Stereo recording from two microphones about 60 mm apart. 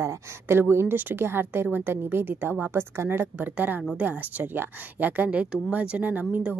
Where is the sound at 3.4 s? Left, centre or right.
Right.